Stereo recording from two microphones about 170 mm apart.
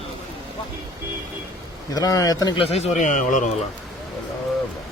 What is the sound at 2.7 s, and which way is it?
Speech, 40° left (ahead or behind).